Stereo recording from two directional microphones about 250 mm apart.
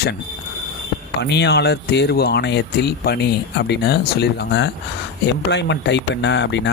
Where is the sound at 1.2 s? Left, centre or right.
Left.